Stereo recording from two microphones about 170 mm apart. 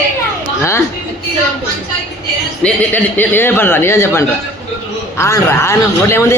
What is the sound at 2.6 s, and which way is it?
A man's voice, 10° left (ahead or behind).